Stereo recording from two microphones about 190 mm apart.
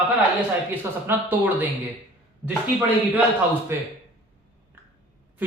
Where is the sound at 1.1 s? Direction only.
10° right (ahead or behind).